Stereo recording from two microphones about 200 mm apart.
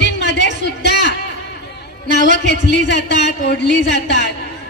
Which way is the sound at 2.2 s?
40° right (ahead or behind).